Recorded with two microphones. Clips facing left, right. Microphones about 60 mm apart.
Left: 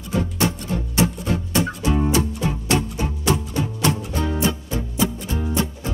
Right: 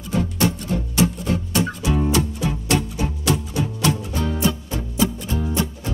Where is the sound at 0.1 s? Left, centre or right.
Left.